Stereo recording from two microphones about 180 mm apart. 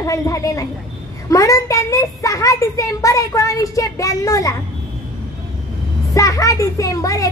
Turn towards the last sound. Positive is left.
turn(degrees=20)  # may be behind; listen again after turning